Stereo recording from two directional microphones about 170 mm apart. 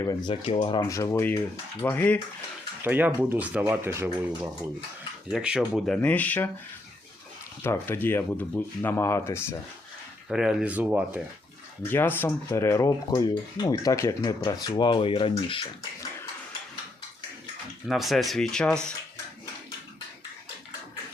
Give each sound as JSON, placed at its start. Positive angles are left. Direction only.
{"t": 0.0, "sound": "speech", "side_deg": 25}
{"t": 0.9, "sound": "speech", "side_deg": 20}
{"t": 2.8, "sound": "speech", "side_deg": -10}
{"t": 7.6, "sound": "speech", "side_deg": 15}
{"t": 10.2, "sound": "speech", "side_deg": -5}
{"t": 11.8, "sound": "speech", "side_deg": 10}
{"t": 17.8, "sound": "speech", "side_deg": 0}